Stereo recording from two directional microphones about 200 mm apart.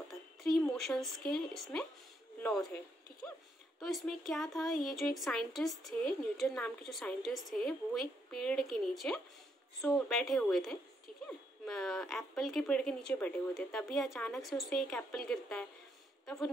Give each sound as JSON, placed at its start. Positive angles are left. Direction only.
{"t": 0.4, "sound": "speech", "side_deg": 0}